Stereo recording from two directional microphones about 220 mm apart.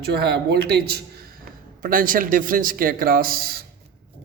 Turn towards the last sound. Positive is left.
turn(degrees=-40)  # may be behind; listen again after turning